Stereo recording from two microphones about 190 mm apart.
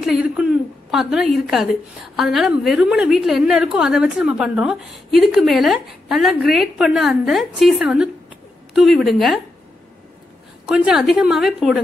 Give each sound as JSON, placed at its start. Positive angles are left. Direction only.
{"t": 0.0, "sound": "a woman's voice", "side_deg": -5}
{"t": 10.7, "sound": "a woman's voice", "side_deg": 0}